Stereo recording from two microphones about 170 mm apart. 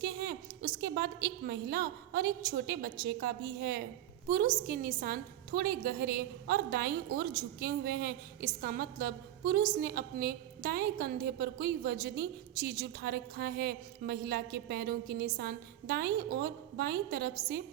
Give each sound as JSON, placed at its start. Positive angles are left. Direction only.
{"t": 0.0, "sound": "a woman's voice", "side_deg": -70}
{"t": 4.3, "sound": "a woman's voice", "side_deg": -60}